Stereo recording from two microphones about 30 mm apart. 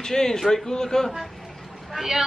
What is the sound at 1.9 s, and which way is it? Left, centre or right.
Vehicle, centre.